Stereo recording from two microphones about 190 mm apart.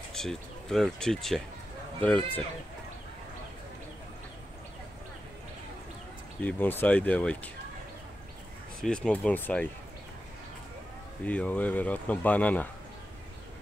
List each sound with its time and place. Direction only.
0.1 s speech: centre (ahead or behind)
6.4 s speech: 10° left (ahead or behind)
8.8 s speech: 5° left (ahead or behind)
11.2 s speech: 10° left (ahead or behind)